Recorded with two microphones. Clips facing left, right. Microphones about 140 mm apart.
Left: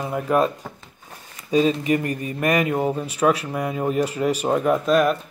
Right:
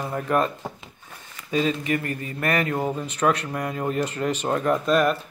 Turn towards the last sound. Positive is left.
turn(degrees=0)  # may be behind; listen again after turning